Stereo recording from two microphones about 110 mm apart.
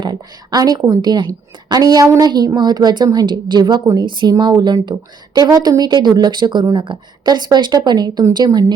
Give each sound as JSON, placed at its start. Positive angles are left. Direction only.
{"t": 0.0, "sound": "a woman's voice", "side_deg": -40}